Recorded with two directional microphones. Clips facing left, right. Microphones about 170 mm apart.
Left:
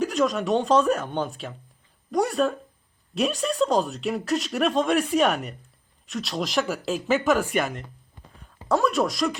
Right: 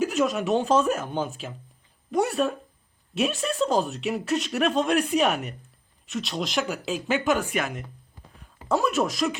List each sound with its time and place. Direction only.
0.0 s speech: 5° right (ahead or behind)